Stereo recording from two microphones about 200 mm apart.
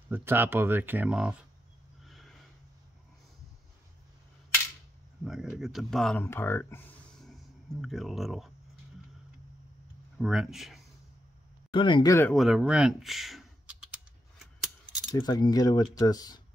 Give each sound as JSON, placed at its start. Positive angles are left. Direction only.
{"t": 0.1, "sound": "speech", "side_deg": -10}
{"t": 2.0, "sound": "snort", "side_deg": 0}
{"t": 5.2, "sound": "speech", "side_deg": -5}
{"t": 10.1, "sound": "speech", "side_deg": -5}
{"t": 11.7, "sound": "speech", "side_deg": 25}
{"t": 12.4, "sound": "speech", "side_deg": 0}
{"t": 15.1, "sound": "speech", "side_deg": 20}